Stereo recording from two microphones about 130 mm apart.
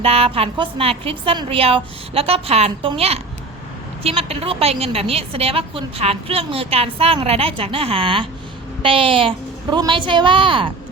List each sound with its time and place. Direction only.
0.0 s a woman's voice: 50° right (ahead or behind)